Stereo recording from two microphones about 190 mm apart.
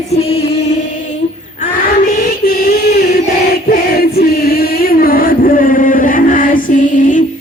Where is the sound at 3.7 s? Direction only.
55° left (ahead or behind).